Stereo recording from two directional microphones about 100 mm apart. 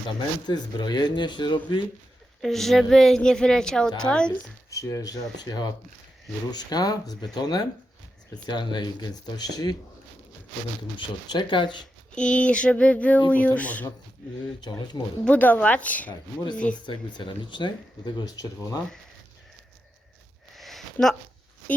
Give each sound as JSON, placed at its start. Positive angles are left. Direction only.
{"t": 0.4, "sound": "speech", "side_deg": 45}
{"t": 2.4, "sound": "a woman's voice", "side_deg": 5}
{"t": 4.7, "sound": "speech", "side_deg": 30}
{"t": 10.9, "sound": "speech", "side_deg": 50}
{"t": 12.1, "sound": "speech", "side_deg": 10}
{"t": 15.2, "sound": "speech", "side_deg": 15}
{"t": 16.8, "sound": "speech", "side_deg": 55}
{"t": 20.5, "sound": "a sound", "side_deg": 0}